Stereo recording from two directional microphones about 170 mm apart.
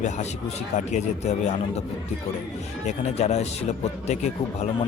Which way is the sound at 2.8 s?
40° left (ahead or behind).